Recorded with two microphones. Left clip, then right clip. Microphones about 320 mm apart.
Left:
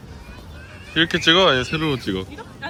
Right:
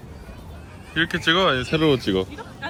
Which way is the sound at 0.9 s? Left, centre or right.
Centre.